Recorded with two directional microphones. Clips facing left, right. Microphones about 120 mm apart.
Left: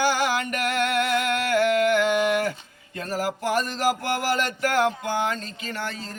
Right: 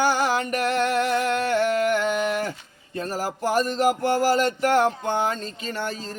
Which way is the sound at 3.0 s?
35° right (ahead or behind).